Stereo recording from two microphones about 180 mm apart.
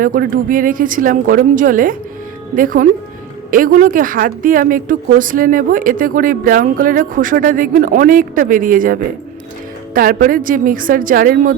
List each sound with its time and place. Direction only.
0.0 s speech: 50° right (ahead or behind)